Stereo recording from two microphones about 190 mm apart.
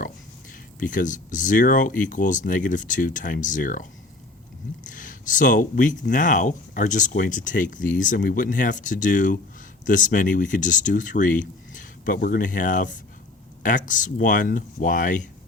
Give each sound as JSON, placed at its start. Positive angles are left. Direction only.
{"t": 0.8, "sound": "speech", "side_deg": 45}
{"t": 4.9, "sound": "speech", "side_deg": 45}